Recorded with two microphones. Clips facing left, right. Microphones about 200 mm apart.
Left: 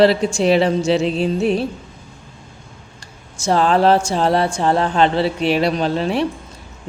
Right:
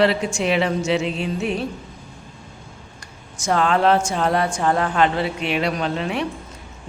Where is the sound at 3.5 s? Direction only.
30° left (ahead or behind).